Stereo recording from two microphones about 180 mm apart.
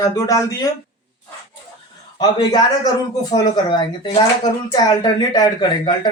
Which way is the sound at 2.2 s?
20° left (ahead or behind).